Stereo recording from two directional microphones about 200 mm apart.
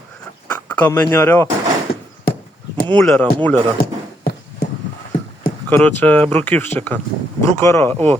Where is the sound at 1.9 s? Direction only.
50° left (ahead or behind).